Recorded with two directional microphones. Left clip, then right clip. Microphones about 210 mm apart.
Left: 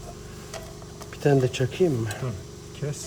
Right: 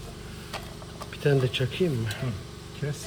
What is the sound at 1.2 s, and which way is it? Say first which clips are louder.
Speech: left 3 dB; 40° left (ahead or behind).